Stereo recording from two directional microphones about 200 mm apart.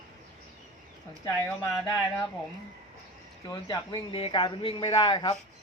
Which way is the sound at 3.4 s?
20° left (ahead or behind).